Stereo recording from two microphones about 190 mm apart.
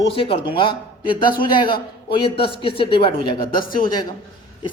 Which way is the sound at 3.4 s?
50° left (ahead or behind).